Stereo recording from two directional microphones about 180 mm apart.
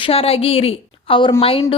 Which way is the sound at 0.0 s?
30° left (ahead or behind).